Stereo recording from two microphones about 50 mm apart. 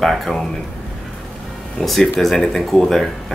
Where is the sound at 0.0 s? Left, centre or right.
Centre.